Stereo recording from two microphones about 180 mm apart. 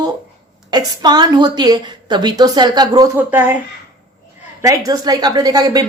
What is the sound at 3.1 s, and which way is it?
Speech, 10° right (ahead or behind).